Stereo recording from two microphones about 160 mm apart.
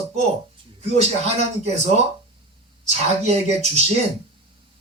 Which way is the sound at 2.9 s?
40° right (ahead or behind).